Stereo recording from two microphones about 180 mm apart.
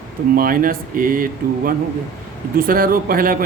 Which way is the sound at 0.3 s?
50° right (ahead or behind).